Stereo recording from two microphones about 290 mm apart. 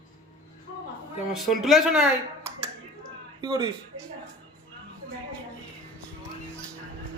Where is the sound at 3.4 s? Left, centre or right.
Centre.